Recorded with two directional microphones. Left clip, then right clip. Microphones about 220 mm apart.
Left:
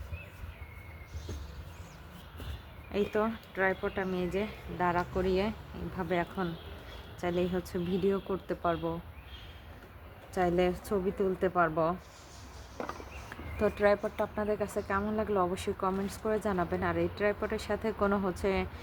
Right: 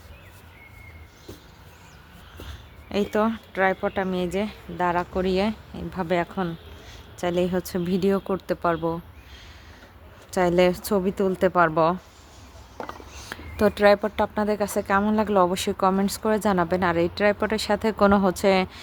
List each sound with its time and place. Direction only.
2.9 s speech: 50° right (ahead or behind)
10.3 s speech: 45° right (ahead or behind)
12.8 s a sound: 25° right (ahead or behind)
13.2 s speech: 45° right (ahead or behind)